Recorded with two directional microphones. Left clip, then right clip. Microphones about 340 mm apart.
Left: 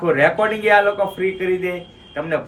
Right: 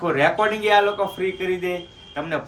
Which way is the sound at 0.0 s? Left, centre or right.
Centre.